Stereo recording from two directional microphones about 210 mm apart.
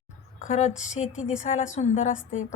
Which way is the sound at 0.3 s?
35° left (ahead or behind).